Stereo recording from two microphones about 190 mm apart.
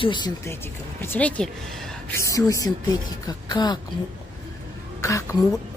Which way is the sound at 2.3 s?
15° left (ahead or behind).